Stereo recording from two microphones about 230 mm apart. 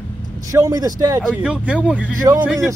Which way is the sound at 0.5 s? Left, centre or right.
Centre.